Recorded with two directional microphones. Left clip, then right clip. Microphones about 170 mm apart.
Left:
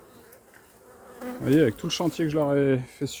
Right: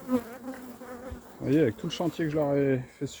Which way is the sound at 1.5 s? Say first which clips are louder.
Left 4 dB; 30° left (ahead or behind).